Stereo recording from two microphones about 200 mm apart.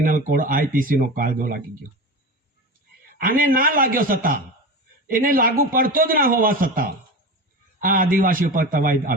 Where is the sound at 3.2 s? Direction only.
45° right (ahead or behind).